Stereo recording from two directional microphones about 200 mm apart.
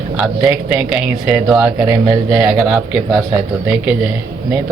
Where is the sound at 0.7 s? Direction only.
5° right (ahead or behind).